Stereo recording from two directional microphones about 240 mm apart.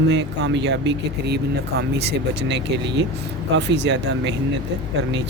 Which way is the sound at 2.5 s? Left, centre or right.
Right.